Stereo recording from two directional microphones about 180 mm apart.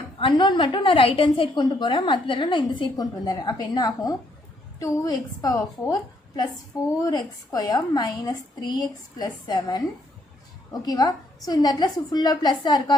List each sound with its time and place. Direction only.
0.2 s a woman's voice: 25° left (ahead or behind)